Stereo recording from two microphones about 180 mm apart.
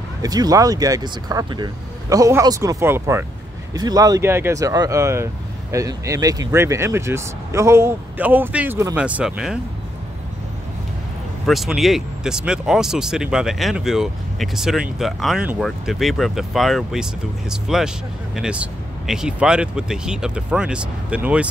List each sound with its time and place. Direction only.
0.2 s a man's voice: 20° right (ahead or behind); by 9.6 s 5° right (ahead or behind)
11.4 s speech: centre (ahead or behind)